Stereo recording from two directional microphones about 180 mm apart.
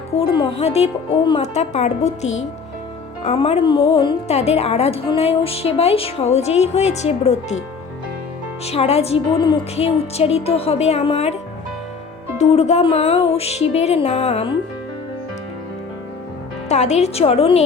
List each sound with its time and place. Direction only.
0.1 s a woman's voice: 35° left (ahead or behind)
8.6 s a woman's voice: 35° left (ahead or behind)
12.4 s a woman's voice: 40° left (ahead or behind)
16.6 s a woman's voice: 40° left (ahead or behind)